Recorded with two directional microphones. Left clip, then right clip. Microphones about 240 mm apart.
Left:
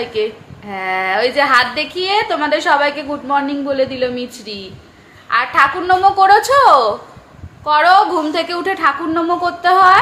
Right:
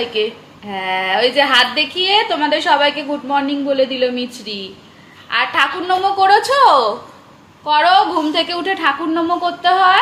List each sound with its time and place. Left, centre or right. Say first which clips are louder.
0.0 s a woman's voice: even; centre